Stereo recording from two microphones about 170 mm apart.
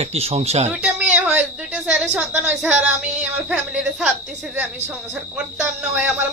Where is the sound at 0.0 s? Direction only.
35° right (ahead or behind).